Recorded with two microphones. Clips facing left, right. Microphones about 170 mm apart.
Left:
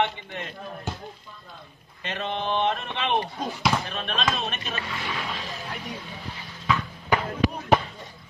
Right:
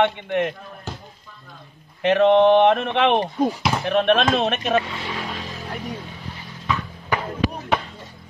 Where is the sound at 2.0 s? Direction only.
70° right (ahead or behind).